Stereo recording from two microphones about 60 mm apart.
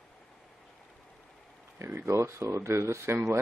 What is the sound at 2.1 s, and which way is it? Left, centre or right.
Speech, right.